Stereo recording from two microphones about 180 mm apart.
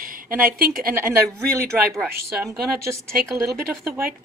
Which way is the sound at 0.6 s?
55° right (ahead or behind).